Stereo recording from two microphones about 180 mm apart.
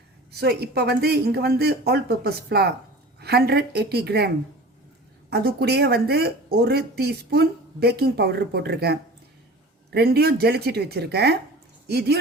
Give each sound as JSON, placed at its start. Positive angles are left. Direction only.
{"t": 0.3, "sound": "speech", "side_deg": -60}
{"t": 5.3, "sound": "speech", "side_deg": -60}